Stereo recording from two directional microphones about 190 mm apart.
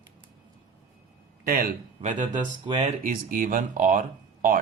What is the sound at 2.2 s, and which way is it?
Speech, 25° right (ahead or behind).